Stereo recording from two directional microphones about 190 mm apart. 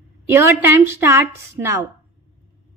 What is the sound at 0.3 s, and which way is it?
A woman's voice, 10° right (ahead or behind).